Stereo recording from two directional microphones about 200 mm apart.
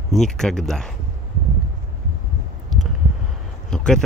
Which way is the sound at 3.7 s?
5° left (ahead or behind).